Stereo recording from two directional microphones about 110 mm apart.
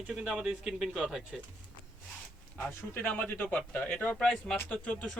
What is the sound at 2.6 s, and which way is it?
Speech, 15° left (ahead or behind).